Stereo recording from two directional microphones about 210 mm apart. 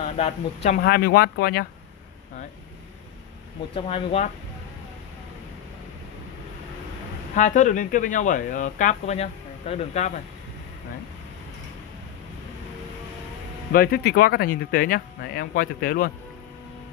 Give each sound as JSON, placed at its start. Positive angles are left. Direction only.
{"t": 0.2, "sound": "speech", "side_deg": 30}
{"t": 0.7, "sound": "speech", "side_deg": 50}
{"t": 3.7, "sound": "speech", "side_deg": 25}
{"t": 7.3, "sound": "speech", "side_deg": 35}
{"t": 13.7, "sound": "speech", "side_deg": 45}